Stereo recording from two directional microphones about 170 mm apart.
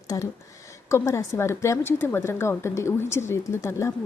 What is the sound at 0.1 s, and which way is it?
A woman's voice, 20° left (ahead or behind).